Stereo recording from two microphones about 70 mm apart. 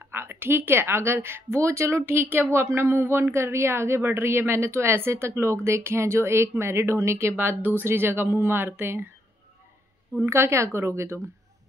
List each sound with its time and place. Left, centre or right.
0.1 s a woman's voice: right
10.2 s a woman's voice: right